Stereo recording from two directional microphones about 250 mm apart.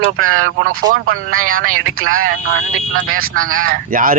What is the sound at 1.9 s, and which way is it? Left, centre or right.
Speech, right.